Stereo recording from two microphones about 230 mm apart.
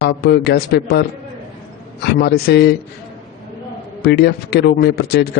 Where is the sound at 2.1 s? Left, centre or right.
Left.